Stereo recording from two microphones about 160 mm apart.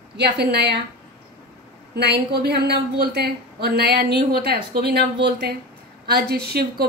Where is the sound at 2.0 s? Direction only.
90° right.